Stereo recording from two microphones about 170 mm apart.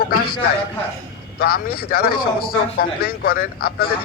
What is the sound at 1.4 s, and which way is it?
Speech, 60° left (ahead or behind).